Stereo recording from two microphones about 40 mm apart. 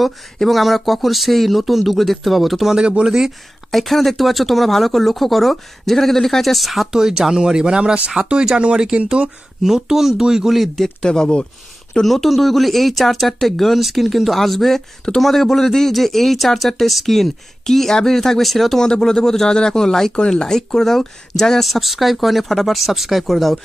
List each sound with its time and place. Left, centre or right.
0.0 s speech: centre
3.0 s speech: centre
3.7 s speech: centre
6.9 s speech: centre
10.8 s speech: centre
12.0 s speech: centre
18.8 s speech: centre
21.6 s speech: centre